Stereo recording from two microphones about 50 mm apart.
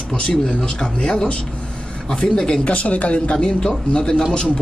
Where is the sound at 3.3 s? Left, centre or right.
Centre.